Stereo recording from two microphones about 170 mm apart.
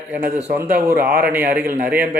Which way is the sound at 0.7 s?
60° right (ahead or behind).